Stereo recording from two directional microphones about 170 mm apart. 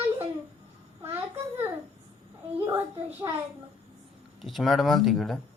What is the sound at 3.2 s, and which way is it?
Speech, 20° right (ahead or behind).